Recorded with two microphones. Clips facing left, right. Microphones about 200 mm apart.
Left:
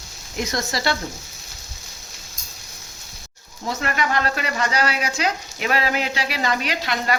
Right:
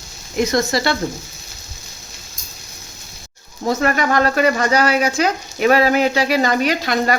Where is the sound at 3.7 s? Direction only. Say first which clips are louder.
Right 7 dB; 45° right (ahead or behind).